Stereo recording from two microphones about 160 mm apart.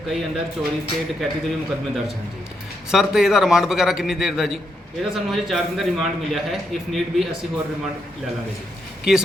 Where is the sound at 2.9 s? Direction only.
5° right (ahead or behind).